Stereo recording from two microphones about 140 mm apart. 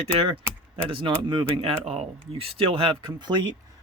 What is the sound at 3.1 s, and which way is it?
Speech, 35° right (ahead or behind).